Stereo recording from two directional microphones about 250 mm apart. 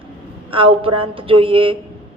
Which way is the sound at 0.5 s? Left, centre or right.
Right.